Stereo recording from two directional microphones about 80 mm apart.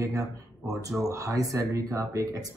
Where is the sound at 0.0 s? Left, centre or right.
Right.